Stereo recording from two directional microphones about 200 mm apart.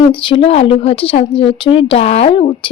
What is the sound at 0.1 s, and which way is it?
Speech, 25° left (ahead or behind).